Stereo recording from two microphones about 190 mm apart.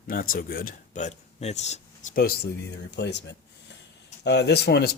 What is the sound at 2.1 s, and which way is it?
Speech, 55° left (ahead or behind).